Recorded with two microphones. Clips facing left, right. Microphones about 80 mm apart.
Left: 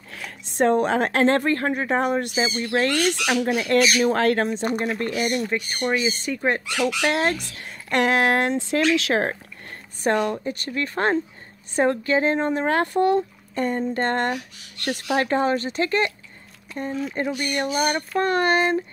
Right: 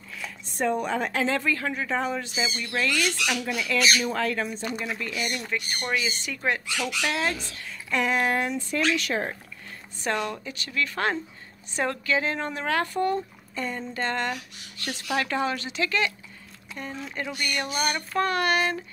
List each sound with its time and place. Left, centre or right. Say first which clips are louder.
0.1 s a woman's voice: left 1 dB; left
4.0 s speech: left 8 dB; left
4.6 s speech: left 7 dB; left
5.5 s speech: left 5 dB; left
6.8 s speech: left 6 dB; left
7.6 s speech: left 5 dB; left
9.3 s a sound: left 5 dB; left
10.1 s a woman's voice: left 7 dB; left
12.8 s speech: left 6 dB; left
15.1 s a woman's voice: left 5 dB; left